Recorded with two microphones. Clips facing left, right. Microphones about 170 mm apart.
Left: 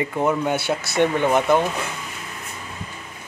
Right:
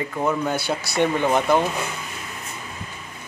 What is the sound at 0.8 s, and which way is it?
Speech, 20° left (ahead or behind).